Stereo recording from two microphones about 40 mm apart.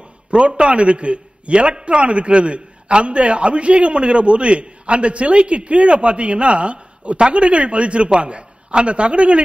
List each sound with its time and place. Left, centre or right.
0.3 s a man's voice: right